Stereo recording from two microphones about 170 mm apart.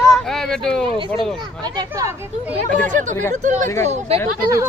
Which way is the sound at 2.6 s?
50° right (ahead or behind).